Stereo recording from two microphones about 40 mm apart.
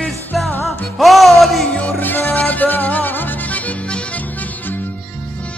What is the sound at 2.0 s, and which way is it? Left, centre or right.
Music, left.